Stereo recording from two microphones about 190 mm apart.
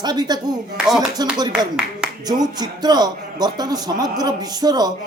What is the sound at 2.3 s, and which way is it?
A man's voice, 20° right (ahead or behind).